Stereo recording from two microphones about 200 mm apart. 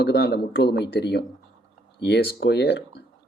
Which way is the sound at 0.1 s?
50° left (ahead or behind).